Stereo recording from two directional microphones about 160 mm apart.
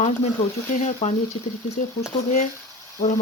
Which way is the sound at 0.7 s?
55° left (ahead or behind).